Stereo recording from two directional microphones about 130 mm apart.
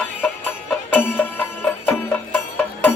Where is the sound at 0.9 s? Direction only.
15° left (ahead or behind).